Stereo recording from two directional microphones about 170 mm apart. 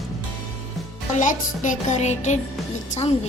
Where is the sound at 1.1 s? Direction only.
50° left (ahead or behind).